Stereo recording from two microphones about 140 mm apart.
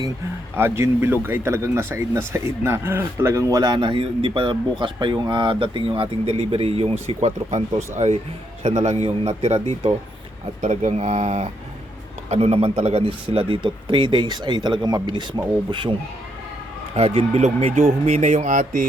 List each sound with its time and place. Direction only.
0.5 s speech: 15° right (ahead or behind); by 6.9 s 45° right (ahead or behind)
7.1 s a man's voice: 55° right (ahead or behind); by 16.0 s 35° right (ahead or behind)
16.9 s a man's voice: 50° right (ahead or behind); by 18.9 s 70° right (ahead or behind)